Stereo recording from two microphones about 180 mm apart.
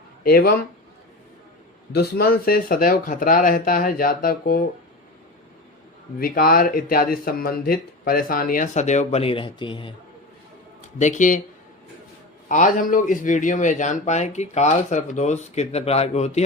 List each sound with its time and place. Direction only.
0.3 s speech: 55° left (ahead or behind)
1.9 s speech: 60° left (ahead or behind)
6.1 s speech: 55° left (ahead or behind); by 9.9 s 30° left (ahead or behind)
10.9 s speech: 40° left (ahead or behind)
12.5 s speech: 45° left (ahead or behind)